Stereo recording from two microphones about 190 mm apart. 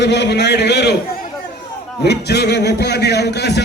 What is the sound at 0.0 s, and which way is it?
Speech, 60° left (ahead or behind).